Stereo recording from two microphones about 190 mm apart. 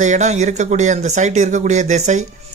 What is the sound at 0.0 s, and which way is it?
Speech, 40° right (ahead or behind).